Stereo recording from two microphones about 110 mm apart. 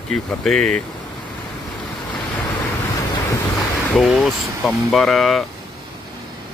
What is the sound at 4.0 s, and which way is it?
Speech, centre (ahead or behind).